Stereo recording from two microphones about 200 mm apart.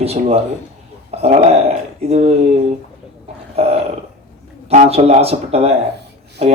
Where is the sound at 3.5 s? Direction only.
30° right (ahead or behind).